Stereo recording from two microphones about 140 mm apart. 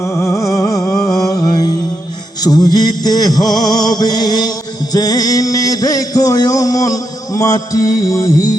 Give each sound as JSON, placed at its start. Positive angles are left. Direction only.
{"t": 0.0, "sound": "music", "side_deg": 20}